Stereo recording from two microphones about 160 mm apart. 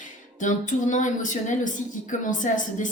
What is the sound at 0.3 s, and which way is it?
A woman's voice, 50° left (ahead or behind).